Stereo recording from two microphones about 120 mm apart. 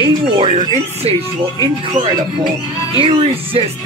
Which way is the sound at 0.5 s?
60° right (ahead or behind).